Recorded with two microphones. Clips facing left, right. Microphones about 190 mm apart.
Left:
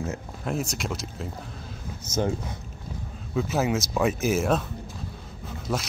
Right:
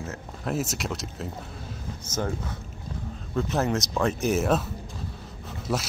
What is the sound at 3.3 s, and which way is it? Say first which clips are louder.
Speech: left 1 dB; 5° left (ahead or behind).